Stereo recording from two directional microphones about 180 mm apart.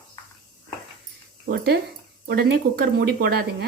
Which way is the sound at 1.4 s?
60° right (ahead or behind).